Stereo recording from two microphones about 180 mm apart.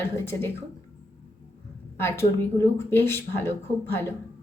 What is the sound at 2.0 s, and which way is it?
A woman's voice, 15° left (ahead or behind).